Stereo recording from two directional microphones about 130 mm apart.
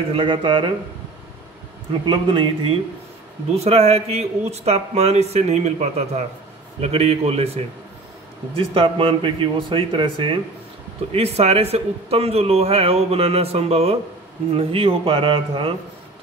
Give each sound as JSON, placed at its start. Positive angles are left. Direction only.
{"t": 0.1, "sound": "speech", "side_deg": -40}
{"t": 2.0, "sound": "speech", "side_deg": -40}
{"t": 3.5, "sound": "a man's voice", "side_deg": -50}
{"t": 11.1, "sound": "a man's voice", "side_deg": -50}